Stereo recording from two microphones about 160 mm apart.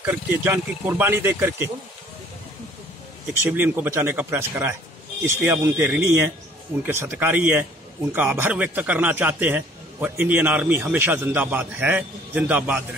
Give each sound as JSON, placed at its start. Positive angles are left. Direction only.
{"t": 0.0, "sound": "speech", "side_deg": -10}
{"t": 3.3, "sound": "speech", "side_deg": -15}